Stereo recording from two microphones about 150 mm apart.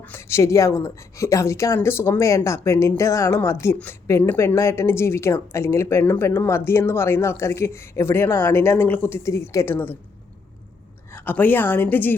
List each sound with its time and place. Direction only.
0.0 s a woman's voice: 15° left (ahead or behind)
11.1 s a woman's voice: 15° left (ahead or behind)